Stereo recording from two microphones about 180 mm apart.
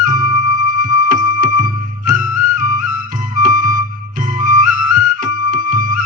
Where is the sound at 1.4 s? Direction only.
45° right (ahead or behind).